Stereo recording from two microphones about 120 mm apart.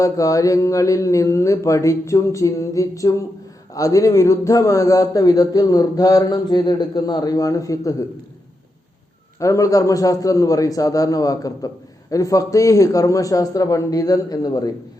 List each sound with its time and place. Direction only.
0.0 s a man's voice: 30° left (ahead or behind)
9.4 s a man's voice: 25° left (ahead or behind)